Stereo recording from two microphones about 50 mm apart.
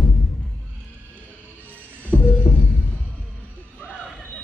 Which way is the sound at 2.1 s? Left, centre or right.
Left.